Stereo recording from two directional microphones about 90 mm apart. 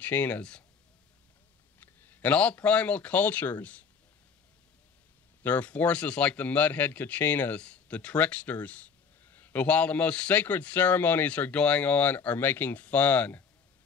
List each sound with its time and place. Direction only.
0.0 s speech: 20° left (ahead or behind)
1.8 s speech: 20° left (ahead or behind)
5.4 s speech: 15° left (ahead or behind)